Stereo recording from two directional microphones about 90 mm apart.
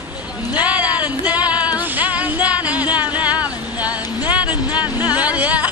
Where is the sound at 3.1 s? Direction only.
15° right (ahead or behind).